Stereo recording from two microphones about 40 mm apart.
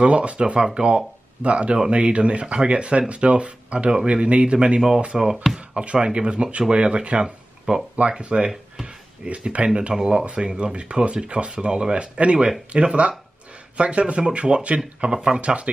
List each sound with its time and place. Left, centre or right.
0.0 s speech: right
4.7 s speech: centre